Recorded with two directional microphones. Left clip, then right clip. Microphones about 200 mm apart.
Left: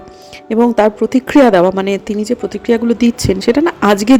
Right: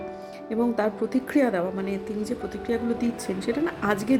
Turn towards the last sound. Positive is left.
turn(degrees=40)  # may be behind; listen again after turning